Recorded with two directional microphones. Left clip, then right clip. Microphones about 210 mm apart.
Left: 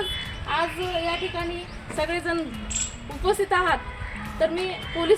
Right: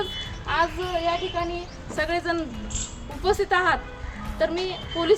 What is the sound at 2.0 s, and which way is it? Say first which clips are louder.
A woman's voice: right 1 dB; 10° left (ahead or behind).